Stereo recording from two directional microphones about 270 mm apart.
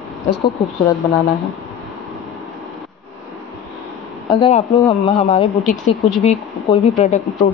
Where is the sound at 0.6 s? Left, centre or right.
Centre.